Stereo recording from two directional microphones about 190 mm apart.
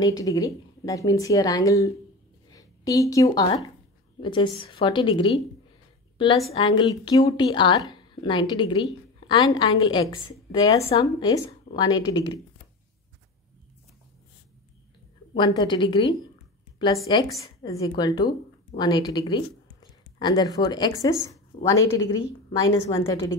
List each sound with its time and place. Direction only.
0.0 s a woman's voice: 15° left (ahead or behind)
6.5 s a woman's voice: 25° left (ahead or behind)
15.3 s a woman's voice: 25° left (ahead or behind)
16.7 s a sound: 20° left (ahead or behind)
17.2 s a woman's voice: 20° left (ahead or behind)